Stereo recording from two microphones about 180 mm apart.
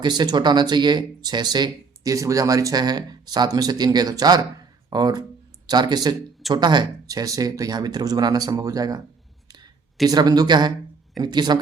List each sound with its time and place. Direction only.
0.0 s speech: 25° right (ahead or behind)
10.1 s speech: 20° right (ahead or behind)